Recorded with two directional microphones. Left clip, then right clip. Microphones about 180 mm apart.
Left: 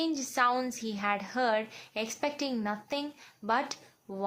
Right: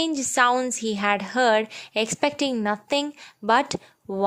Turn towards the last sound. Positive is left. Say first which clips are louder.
# right 11 dB
turn(degrees=-50)  # may be behind; listen again after turning